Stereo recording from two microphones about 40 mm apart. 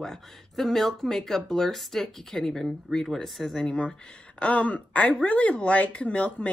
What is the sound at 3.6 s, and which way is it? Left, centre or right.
Speech, left.